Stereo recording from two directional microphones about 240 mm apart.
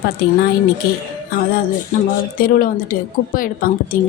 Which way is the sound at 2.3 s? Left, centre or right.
Left.